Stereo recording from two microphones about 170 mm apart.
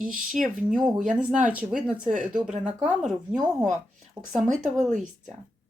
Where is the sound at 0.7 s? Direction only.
5° right (ahead or behind).